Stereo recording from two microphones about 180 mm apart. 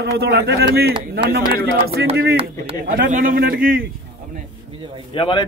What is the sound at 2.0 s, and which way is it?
Speech, 70° right (ahead or behind).